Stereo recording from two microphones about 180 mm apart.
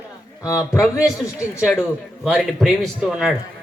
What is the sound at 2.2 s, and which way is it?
A man's voice, centre (ahead or behind).